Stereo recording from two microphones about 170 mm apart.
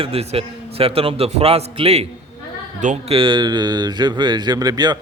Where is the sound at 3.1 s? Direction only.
30° right (ahead or behind).